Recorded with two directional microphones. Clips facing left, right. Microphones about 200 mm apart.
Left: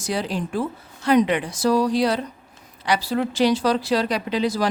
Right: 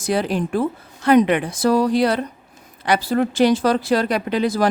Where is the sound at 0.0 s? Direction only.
55° right (ahead or behind).